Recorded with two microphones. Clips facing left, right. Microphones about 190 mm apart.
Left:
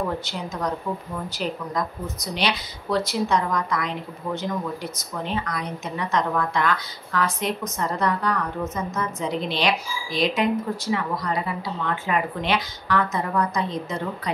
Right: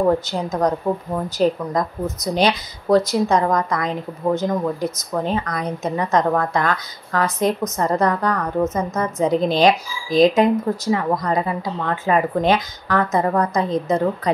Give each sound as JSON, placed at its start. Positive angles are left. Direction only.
{"t": 0.3, "sound": "speech", "side_deg": -40}